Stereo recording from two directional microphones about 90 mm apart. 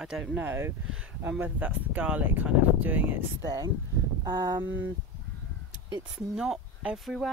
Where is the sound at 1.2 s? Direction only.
20° right (ahead or behind).